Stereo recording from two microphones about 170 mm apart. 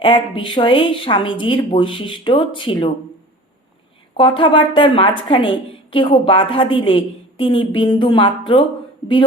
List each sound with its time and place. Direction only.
0.0 s a woman's voice: 30° left (ahead or behind)
4.2 s a woman's voice: 30° left (ahead or behind)